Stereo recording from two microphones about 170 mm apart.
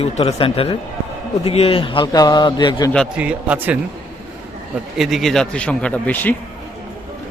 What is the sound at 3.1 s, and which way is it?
Speech, 5° right (ahead or behind).